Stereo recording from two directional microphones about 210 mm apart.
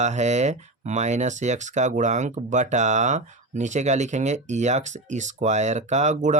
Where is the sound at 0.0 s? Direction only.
35° right (ahead or behind).